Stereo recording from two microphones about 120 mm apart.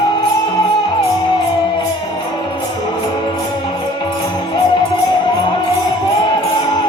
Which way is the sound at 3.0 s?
40° left (ahead or behind).